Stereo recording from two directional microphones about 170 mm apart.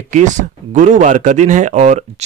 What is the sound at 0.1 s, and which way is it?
Speech, 45° right (ahead or behind).